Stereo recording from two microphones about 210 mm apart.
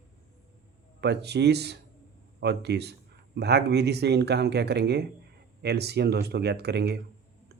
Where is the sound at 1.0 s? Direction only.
55° right (ahead or behind).